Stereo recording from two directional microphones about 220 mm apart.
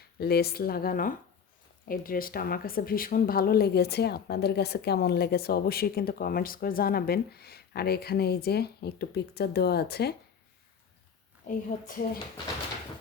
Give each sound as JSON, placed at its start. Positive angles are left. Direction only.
{"t": 0.2, "sound": "speech", "side_deg": 45}
{"t": 11.4, "sound": "a woman's voice", "side_deg": 40}